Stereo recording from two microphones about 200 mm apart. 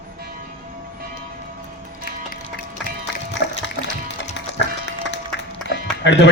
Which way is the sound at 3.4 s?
60° left (ahead or behind).